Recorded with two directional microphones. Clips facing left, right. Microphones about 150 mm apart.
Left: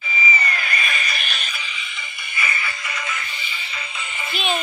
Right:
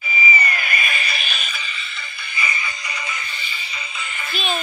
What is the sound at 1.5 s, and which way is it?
Music, 10° left (ahead or behind).